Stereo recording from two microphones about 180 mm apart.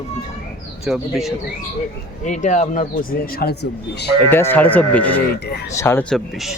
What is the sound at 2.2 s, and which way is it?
Speech, 40° left (ahead or behind).